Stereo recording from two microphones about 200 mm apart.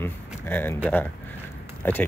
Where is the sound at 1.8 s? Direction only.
10° left (ahead or behind).